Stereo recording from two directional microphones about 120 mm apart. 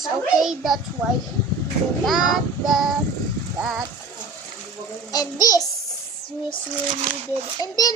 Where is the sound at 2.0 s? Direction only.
Centre (ahead or behind).